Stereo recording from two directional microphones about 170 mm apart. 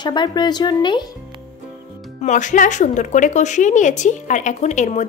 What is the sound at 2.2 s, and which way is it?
A woman's voice, 45° left (ahead or behind).